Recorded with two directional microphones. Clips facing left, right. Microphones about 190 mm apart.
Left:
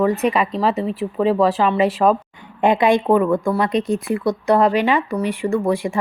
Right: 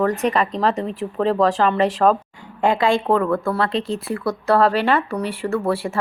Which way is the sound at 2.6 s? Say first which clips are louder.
Left 3 dB; 20° left (ahead or behind).